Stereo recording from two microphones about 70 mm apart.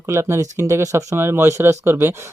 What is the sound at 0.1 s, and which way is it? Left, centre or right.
Speech, right.